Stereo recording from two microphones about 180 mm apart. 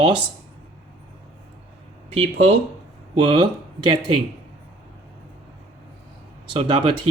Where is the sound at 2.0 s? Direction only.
30° right (ahead or behind).